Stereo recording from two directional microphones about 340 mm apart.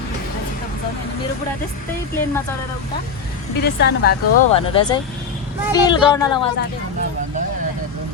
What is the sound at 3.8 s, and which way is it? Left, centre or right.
Speech, left.